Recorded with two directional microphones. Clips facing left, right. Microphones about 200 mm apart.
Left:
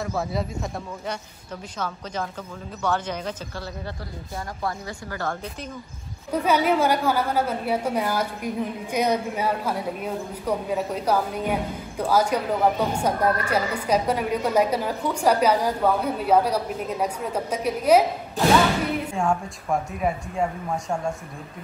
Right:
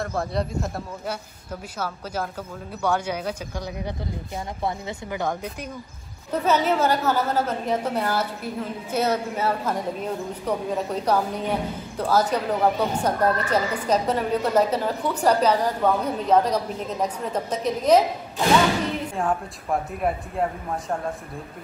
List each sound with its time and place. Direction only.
0.0 s speech: centre (ahead or behind); by 5.7 s 15° right (ahead or behind)
6.3 s speech: 10° left (ahead or behind)
19.1 s speech: centre (ahead or behind)